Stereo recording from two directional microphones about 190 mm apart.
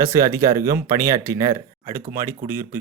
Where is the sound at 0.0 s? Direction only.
15° right (ahead or behind).